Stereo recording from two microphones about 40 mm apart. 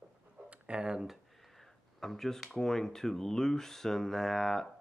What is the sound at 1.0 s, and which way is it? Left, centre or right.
Speech, centre.